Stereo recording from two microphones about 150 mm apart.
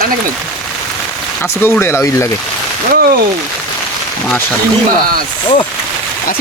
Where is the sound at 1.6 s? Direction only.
15° left (ahead or behind).